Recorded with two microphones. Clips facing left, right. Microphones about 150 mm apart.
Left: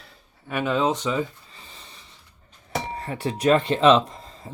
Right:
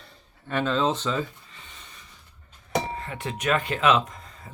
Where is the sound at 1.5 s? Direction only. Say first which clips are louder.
Left 2 dB; 35° left (ahead or behind).